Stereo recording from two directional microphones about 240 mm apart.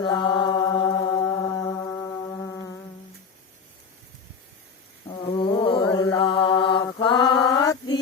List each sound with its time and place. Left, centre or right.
0.0 s mantra: centre
1.2 s music: centre
5.2 s mantra: centre
6.8 s a sound: centre